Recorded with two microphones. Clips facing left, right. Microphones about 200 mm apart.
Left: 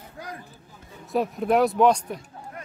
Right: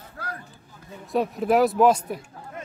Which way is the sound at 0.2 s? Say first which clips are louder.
Right 1 dB; 15° left (ahead or behind).